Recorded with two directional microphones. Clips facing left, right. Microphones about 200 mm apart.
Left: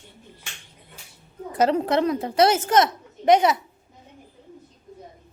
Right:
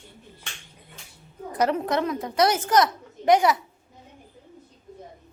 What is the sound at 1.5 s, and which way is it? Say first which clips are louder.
A woman's voice: left 3 dB; 30° left (ahead or behind).